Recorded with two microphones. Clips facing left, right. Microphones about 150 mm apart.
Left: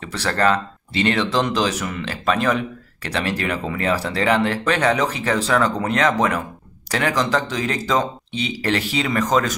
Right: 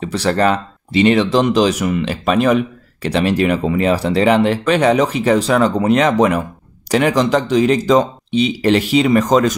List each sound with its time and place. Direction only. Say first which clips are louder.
0.0 s speech: right 5 dB; 15° right (ahead or behind)